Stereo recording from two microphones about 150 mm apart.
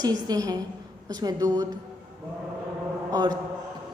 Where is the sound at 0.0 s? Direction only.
25° right (ahead or behind).